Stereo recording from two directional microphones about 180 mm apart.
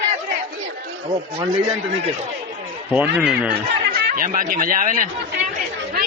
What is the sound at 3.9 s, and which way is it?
Speech, 55° right (ahead or behind).